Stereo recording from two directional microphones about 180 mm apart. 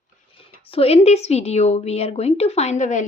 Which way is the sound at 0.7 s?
35° left (ahead or behind).